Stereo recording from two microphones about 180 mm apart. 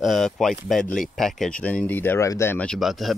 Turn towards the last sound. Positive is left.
turn(degrees=0)  # may be behind; listen again after turning